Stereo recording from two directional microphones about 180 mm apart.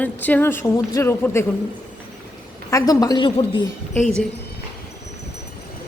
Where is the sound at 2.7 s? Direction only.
20° left (ahead or behind).